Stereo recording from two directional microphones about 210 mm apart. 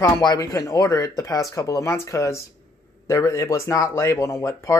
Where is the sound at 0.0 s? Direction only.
15° left (ahead or behind).